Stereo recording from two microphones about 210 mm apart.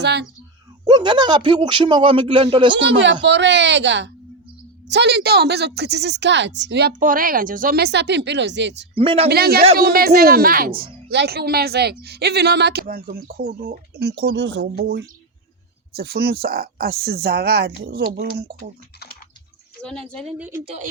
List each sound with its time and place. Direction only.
0.0 s speech: 55° right (ahead or behind)
0.9 s speech: 20° right (ahead or behind)
2.7 s a woman's voice: 60° right (ahead or behind)
9.0 s speech: 25° right (ahead or behind)
9.3 s a woman's voice: 45° right (ahead or behind)
19.8 s a woman's voice: 5° left (ahead or behind)